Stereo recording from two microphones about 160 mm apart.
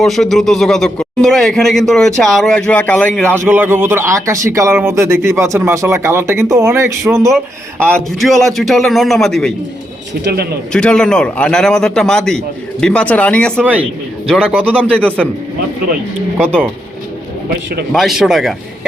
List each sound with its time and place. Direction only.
0.0 s a man's voice: centre (ahead or behind)
3.5 s speech: 10° right (ahead or behind)
7.9 s a man's voice: centre (ahead or behind)
10.2 s speech: 80° right
10.7 s a man's voice: 5° left (ahead or behind)
17.9 s a man's voice: centre (ahead or behind)